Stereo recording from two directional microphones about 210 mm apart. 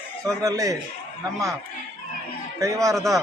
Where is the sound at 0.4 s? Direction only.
15° right (ahead or behind).